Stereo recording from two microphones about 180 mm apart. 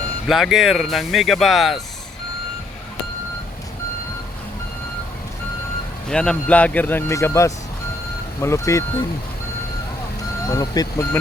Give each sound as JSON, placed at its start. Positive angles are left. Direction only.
{"t": 0.3, "sound": "speech", "side_deg": 0}
{"t": 6.1, "sound": "speech", "side_deg": 5}
{"t": 10.5, "sound": "speech", "side_deg": 20}